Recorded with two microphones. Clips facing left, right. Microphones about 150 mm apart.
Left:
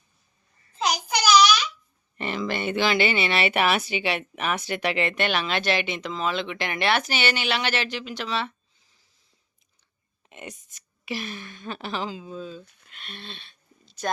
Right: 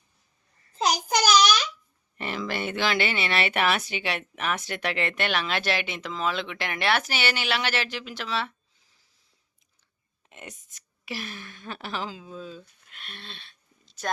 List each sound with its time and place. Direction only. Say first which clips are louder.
0.8 s a sound: right 2 dB; 40° right (ahead or behind)
2.1 s speech: left 2 dB; 5° right (ahead or behind)
10.2 s a woman's voice: left 4 dB; centre (ahead or behind)